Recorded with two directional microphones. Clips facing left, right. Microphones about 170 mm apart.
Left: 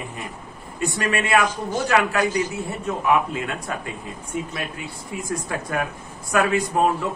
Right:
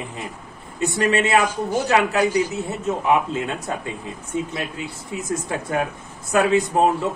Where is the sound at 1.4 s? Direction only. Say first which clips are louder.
Right 2 dB; 10° right (ahead or behind).